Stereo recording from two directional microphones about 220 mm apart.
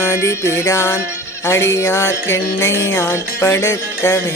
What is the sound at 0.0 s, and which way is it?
Music, 10° left (ahead or behind).